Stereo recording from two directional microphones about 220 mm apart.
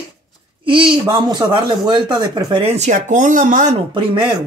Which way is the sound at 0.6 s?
25° right (ahead or behind).